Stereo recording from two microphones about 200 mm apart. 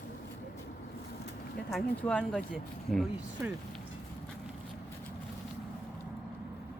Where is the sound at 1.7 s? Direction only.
Centre (ahead or behind).